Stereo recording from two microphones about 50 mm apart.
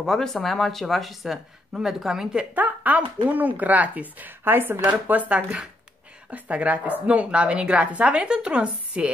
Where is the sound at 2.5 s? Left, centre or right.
Right.